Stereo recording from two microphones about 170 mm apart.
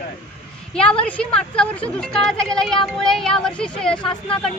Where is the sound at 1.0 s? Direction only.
10° left (ahead or behind).